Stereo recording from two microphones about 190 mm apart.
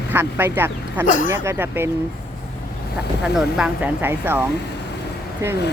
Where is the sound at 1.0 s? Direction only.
45° left (ahead or behind).